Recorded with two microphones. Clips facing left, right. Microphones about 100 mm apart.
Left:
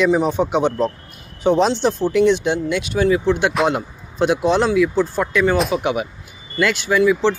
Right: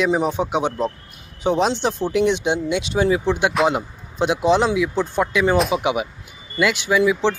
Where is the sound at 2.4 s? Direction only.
20° right (ahead or behind).